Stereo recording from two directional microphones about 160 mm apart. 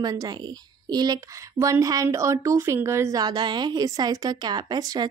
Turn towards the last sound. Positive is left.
turn(degrees=-25)  # may be behind; listen again after turning